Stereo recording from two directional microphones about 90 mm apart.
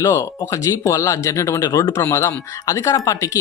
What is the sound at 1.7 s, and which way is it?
Speech, 50° left (ahead or behind).